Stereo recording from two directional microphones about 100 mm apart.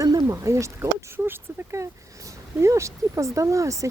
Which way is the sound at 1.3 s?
30° right (ahead or behind).